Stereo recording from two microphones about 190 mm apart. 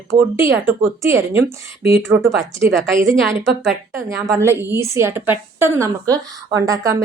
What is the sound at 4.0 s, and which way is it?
A woman's voice, 15° right (ahead or behind).